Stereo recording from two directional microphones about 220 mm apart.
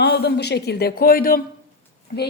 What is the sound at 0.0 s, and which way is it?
Speech, 45° left (ahead or behind).